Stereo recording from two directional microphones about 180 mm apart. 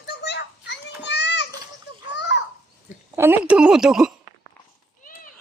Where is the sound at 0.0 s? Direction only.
65° left (ahead or behind).